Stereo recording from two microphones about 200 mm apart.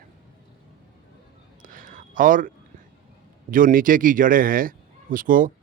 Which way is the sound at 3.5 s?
45° right (ahead or behind).